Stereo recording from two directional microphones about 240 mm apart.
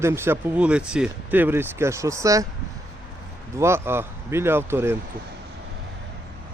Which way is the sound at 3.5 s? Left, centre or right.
Centre.